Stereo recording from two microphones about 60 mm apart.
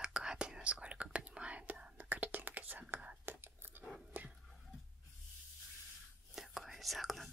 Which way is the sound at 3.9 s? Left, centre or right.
Centre.